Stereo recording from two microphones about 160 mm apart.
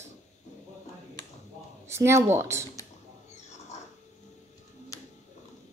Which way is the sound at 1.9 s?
15° right (ahead or behind).